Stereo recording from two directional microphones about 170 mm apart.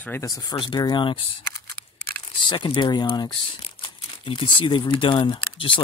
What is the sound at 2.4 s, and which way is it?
Speech, 30° left (ahead or behind).